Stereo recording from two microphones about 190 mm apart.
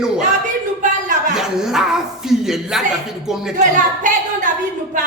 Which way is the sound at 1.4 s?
Centre (ahead or behind).